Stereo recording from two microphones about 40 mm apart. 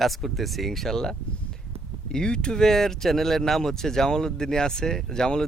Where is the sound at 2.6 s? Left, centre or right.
Centre.